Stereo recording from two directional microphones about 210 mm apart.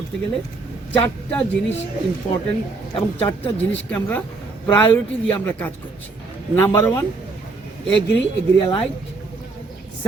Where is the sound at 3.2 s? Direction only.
25° left (ahead or behind).